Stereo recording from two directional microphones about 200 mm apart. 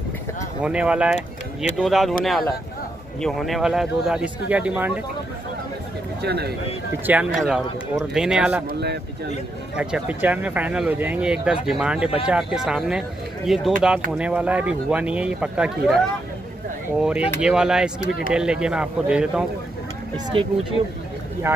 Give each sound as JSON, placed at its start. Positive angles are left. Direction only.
{"t": 0.6, "sound": "speech", "side_deg": -5}
{"t": 3.2, "sound": "speech", "side_deg": 0}
{"t": 6.2, "sound": "speech", "side_deg": -55}
{"t": 7.1, "sound": "speech", "side_deg": -5}
{"t": 8.7, "sound": "speech", "side_deg": -55}
{"t": 9.8, "sound": "speech", "side_deg": -5}
{"t": 17.0, "sound": "speech", "side_deg": -5}
{"t": 20.3, "sound": "speech", "side_deg": -25}
{"t": 21.5, "sound": "speech", "side_deg": -15}